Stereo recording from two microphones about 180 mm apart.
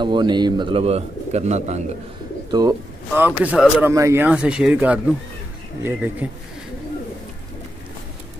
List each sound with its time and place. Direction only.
0.0 s speech: 25° right (ahead or behind)
3.2 s speech: 10° right (ahead or behind)
3.9 s speech: 15° right (ahead or behind)